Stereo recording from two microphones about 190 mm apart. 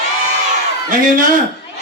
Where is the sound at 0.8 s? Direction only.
45° right (ahead or behind).